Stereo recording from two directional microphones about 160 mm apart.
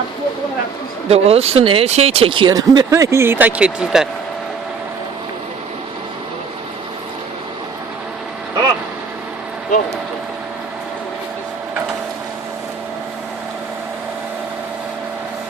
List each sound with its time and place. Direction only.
1.0 s speech: 40° right (ahead or behind); by 4.1 s 5° right (ahead or behind)